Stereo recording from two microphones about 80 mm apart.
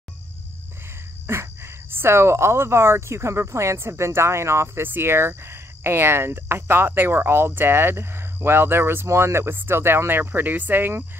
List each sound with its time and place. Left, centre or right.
1.2 s speech: right